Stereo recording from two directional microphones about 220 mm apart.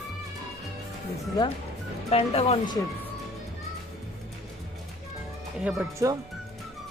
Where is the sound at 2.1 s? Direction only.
30° left (ahead or behind).